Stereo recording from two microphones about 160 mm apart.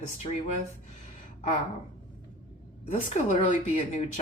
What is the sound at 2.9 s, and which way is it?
Speech, 50° left (ahead or behind).